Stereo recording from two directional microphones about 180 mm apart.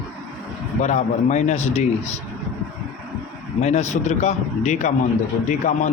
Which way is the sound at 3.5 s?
40° left (ahead or behind).